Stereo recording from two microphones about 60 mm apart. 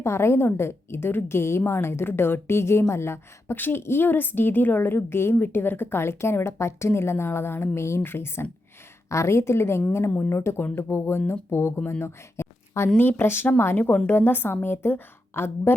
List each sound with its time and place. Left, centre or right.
0.0 s a woman's voice: left
9.0 s a woman's voice: left